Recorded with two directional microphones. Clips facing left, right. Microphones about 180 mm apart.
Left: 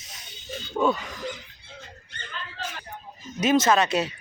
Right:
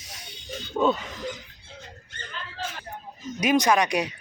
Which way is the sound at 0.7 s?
20° right (ahead or behind).